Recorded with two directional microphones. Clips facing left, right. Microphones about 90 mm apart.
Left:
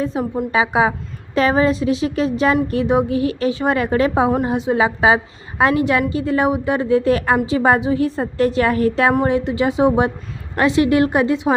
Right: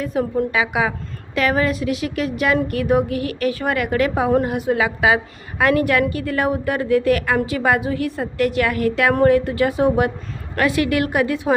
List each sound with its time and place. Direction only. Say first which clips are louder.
0.0 s a woman's voice: even; 25° left (ahead or behind)